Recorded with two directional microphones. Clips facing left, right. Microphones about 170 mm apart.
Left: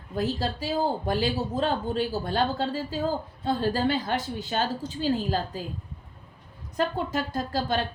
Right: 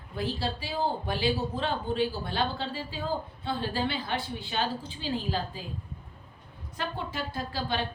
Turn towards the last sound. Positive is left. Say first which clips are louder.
# left 5 dB
turn(degrees=45)  # may be behind; listen again after turning